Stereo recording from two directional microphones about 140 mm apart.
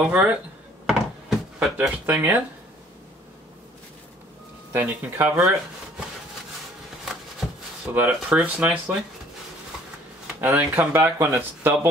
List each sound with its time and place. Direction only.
0.0 s speech: 10° right (ahead or behind)
0.8 s a sound: 5° right (ahead or behind)
4.7 s speech: 15° right (ahead or behind)
7.9 s speech: 10° right (ahead or behind)
10.2 s speech: 10° right (ahead or behind)